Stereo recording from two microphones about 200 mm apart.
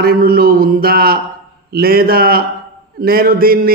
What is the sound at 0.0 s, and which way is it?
A man's voice, 50° right (ahead or behind).